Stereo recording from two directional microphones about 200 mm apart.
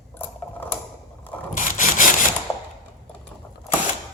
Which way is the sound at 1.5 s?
40° left (ahead or behind).